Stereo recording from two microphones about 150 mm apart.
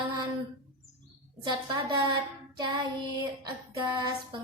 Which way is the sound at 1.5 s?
30° right (ahead or behind).